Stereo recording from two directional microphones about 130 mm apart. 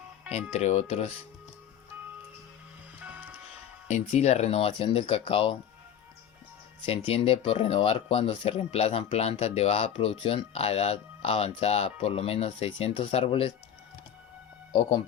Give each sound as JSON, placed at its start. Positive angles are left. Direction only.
{"t": 0.5, "sound": "speech", "side_deg": 60}
{"t": 3.0, "sound": "music", "side_deg": -10}
{"t": 3.8, "sound": "speech", "side_deg": 60}
{"t": 6.8, "sound": "speech", "side_deg": 45}
{"t": 14.7, "sound": "speech", "side_deg": 40}